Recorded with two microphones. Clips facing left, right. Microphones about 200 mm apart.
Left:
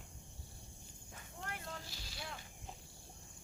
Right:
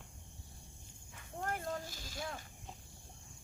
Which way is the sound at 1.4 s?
45° right (ahead or behind).